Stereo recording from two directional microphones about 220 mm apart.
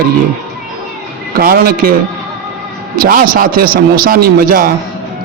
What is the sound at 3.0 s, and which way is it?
A man's voice, 40° right (ahead or behind).